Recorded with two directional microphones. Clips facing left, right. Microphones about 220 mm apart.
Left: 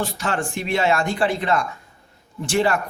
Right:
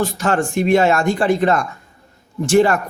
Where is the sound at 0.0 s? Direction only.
45° right (ahead or behind).